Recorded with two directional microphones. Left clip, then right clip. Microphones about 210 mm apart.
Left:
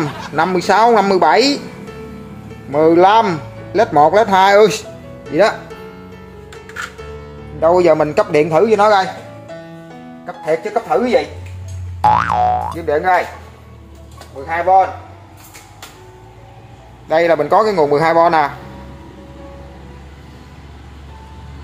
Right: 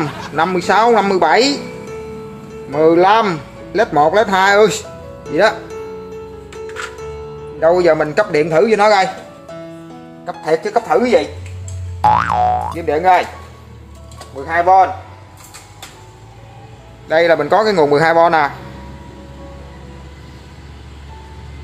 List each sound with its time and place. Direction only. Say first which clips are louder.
0.0 s speech: even; centre (ahead or behind)
2.7 s speech: left 1 dB; 10° left (ahead or behind)
7.6 s a man's voice: left 1 dB; 20° left (ahead or behind)
8.5 s a man's voice: right 1 dB; 5° left (ahead or behind)
10.2 s a man's voice: right 1 dB; 5° right (ahead or behind)
12.0 s a man's voice: even; centre (ahead or behind)
12.8 s a man's voice: right 2 dB; 10° right (ahead or behind)
14.4 s speech: right 2 dB; 40° right (ahead or behind)
17.1 s a man's voice: even; 5° left (ahead or behind)